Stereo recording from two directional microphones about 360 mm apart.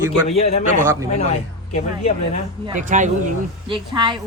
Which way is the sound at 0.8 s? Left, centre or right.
Centre.